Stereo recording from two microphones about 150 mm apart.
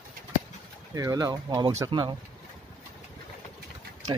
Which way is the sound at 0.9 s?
25° right (ahead or behind).